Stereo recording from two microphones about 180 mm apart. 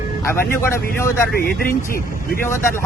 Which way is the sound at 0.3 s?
15° left (ahead or behind).